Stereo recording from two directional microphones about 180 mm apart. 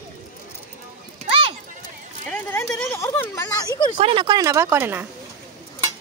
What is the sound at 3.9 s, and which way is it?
Speech, 30° right (ahead or behind).